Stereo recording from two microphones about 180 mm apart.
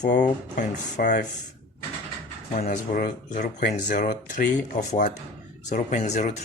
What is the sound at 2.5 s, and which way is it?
Speech, 55° left (ahead or behind).